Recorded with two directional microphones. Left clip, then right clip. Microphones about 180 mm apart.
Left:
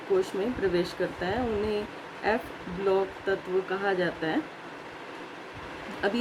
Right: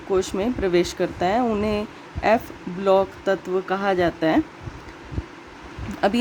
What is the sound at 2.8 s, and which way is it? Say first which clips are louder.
Speech: right 8 dB; 60° right (ahead or behind).